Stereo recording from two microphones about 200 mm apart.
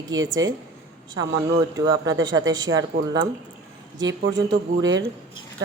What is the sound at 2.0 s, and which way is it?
Speech, 70° right (ahead or behind).